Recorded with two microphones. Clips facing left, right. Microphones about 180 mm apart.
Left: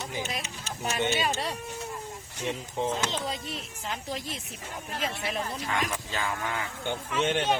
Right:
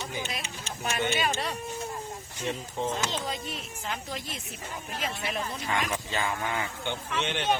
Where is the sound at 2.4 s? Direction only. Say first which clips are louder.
Left 1 dB; 15° left (ahead or behind).